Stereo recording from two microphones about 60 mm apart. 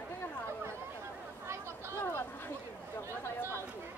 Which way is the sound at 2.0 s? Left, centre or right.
Left.